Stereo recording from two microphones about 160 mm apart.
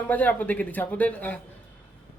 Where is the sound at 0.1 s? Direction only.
10° left (ahead or behind).